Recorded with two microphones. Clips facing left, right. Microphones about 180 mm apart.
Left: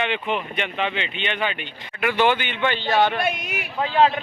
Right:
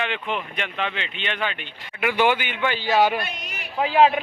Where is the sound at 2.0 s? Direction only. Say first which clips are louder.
Left 1 dB; 10° right (ahead or behind).